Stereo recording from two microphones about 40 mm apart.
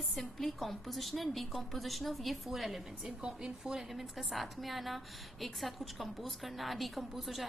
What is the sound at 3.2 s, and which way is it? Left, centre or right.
Speech, centre.